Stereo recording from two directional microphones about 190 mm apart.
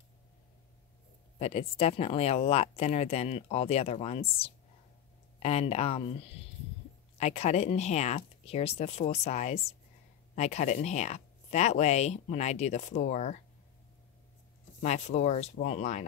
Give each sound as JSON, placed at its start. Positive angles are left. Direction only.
{"t": 1.4, "sound": "speech", "side_deg": 30}
{"t": 14.8, "sound": "speech", "side_deg": 35}